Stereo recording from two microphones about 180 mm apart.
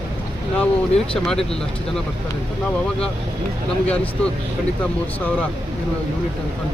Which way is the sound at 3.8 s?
5° left (ahead or behind).